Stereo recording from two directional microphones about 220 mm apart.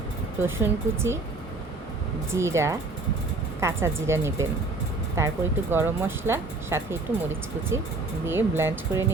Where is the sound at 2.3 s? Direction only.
15° right (ahead or behind).